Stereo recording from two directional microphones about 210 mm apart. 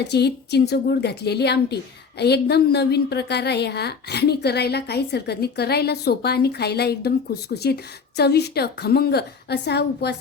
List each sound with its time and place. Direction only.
0.1 s a woman's voice: 50° left (ahead or behind)